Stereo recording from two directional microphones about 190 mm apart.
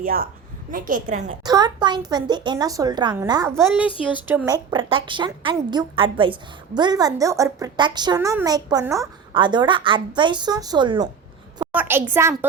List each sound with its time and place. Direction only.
0.0 s a woman's voice: 50° right (ahead or behind)
1.5 s a woman's voice: 20° right (ahead or behind)
11.6 s a woman's voice: 10° right (ahead or behind)